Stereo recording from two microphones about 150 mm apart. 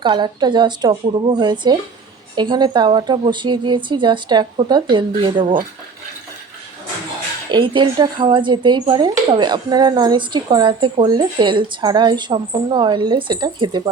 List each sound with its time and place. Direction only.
0.0 s speech: 30° right (ahead or behind)
7.5 s speech: 35° right (ahead or behind)